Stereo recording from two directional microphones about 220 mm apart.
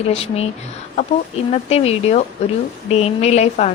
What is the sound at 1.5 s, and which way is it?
A woman's voice, 30° left (ahead or behind).